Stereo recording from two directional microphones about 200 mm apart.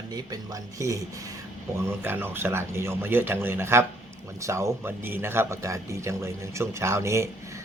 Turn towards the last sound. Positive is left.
turn(degrees=-15)  # may be behind; listen again after turning